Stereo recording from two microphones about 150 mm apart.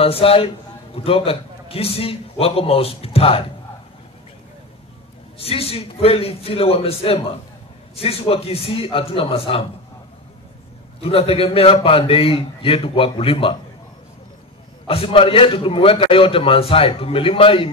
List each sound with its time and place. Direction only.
0.0 s a man's voice: 40° left (ahead or behind)
5.4 s a man's voice: 40° left (ahead or behind)
11.0 s a man's voice: 40° left (ahead or behind)
14.9 s a man's voice: 40° left (ahead or behind)